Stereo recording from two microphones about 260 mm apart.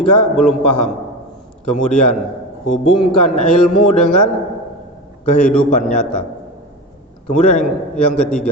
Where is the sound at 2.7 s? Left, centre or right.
Centre.